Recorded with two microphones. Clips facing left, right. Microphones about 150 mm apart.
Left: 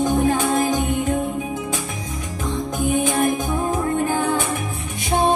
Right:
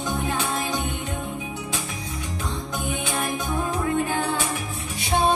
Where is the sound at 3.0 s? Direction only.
50° left (ahead or behind).